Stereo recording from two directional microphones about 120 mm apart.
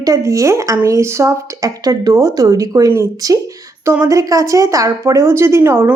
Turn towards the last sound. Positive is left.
turn(degrees=-20)  # may be behind; listen again after turning